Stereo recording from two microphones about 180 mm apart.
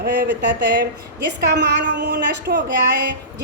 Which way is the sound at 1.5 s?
70° right (ahead or behind).